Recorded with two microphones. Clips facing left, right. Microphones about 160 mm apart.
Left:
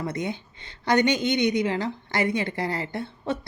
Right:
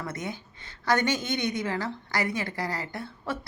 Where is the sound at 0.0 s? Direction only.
20° left (ahead or behind).